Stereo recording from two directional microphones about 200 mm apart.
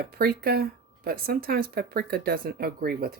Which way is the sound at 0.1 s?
50° right (ahead or behind).